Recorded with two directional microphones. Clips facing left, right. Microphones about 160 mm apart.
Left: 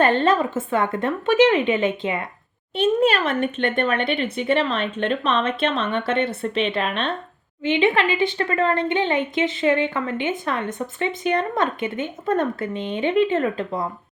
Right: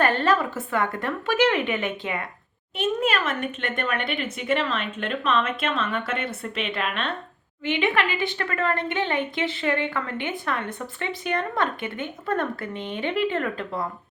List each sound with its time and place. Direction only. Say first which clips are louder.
0.0 s a woman's voice: left 4 dB; 25° left (ahead or behind)